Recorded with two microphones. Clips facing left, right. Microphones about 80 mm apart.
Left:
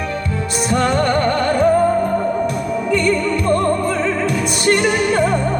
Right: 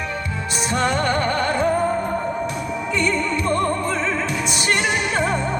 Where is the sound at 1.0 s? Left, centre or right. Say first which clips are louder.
Left 4 dB; centre.